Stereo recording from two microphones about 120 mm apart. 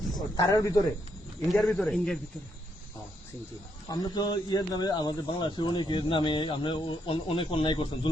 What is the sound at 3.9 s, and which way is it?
Speech, 35° left (ahead or behind).